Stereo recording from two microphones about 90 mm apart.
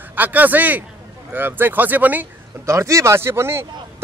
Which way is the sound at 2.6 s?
35° right (ahead or behind).